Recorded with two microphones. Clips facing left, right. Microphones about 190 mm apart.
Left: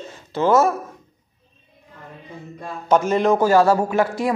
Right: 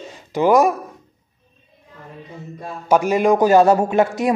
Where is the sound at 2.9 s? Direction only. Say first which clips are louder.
Right 2 dB; 10° right (ahead or behind).